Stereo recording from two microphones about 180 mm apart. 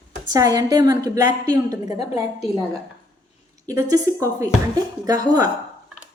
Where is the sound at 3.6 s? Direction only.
20° right (ahead or behind).